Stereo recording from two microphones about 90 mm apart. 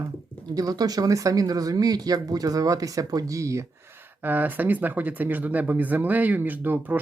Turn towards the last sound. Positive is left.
turn(degrees=-20)  # may be behind; listen again after turning